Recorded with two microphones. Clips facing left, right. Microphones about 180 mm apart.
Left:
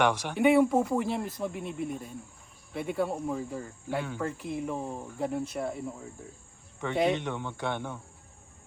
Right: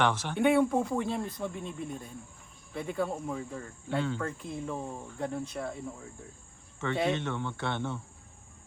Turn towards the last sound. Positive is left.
turn(degrees=10)  # may be behind; listen again after turning